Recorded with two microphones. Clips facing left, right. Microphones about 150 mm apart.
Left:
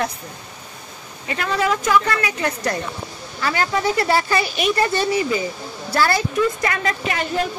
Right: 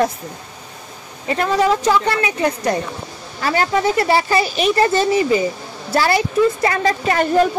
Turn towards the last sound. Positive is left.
turn(degrees=-45)  # may be behind; listen again after turning